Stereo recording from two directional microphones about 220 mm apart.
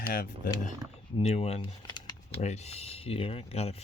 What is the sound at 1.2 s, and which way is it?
Speech, 30° left (ahead or behind).